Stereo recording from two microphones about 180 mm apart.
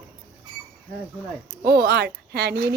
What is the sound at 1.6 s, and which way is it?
Speech, 60° right (ahead or behind).